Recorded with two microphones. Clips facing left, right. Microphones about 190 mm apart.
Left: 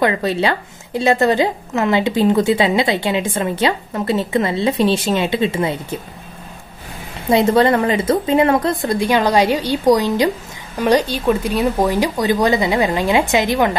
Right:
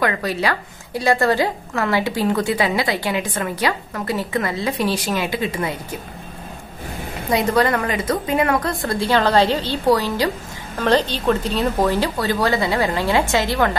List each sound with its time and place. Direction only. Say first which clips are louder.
0.0 s a woman's voice: left 4 dB; 25° left (ahead or behind)
7.2 s a woman's voice: left 5 dB; 25° left (ahead or behind)